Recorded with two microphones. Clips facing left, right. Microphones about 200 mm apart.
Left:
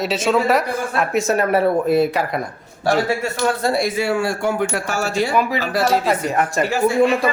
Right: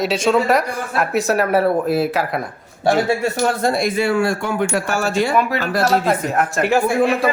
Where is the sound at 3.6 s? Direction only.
55° right (ahead or behind).